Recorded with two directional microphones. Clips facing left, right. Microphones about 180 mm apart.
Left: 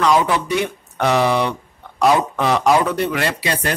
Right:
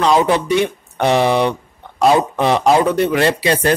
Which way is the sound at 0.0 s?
25° right (ahead or behind).